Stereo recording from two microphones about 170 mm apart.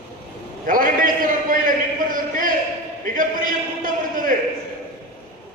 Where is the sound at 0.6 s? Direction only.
55° right (ahead or behind).